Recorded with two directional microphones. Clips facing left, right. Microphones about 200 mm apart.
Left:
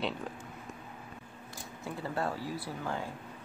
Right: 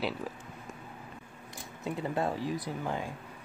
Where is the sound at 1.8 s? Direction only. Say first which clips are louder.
Right 3 dB; 20° right (ahead or behind).